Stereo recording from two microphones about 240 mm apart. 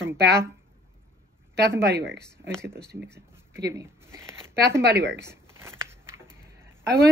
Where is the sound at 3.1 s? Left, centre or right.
Centre.